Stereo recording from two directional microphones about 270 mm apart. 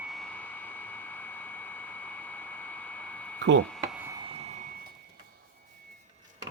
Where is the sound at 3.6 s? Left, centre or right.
Centre; by 4.7 s right.